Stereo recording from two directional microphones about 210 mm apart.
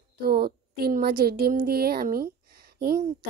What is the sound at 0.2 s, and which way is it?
A woman's voice, 45° right (ahead or behind).